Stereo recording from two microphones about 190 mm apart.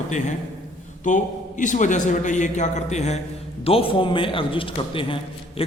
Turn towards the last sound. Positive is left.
turn(degrees=25)  # may be behind; listen again after turning